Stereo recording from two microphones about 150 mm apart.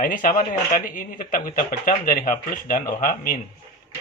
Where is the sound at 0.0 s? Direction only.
65° left (ahead or behind).